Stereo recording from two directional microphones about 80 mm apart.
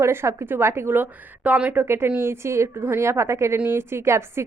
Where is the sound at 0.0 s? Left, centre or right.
Right; by 1.8 s centre.